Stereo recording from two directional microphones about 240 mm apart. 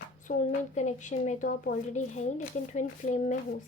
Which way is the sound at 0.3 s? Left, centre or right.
Left.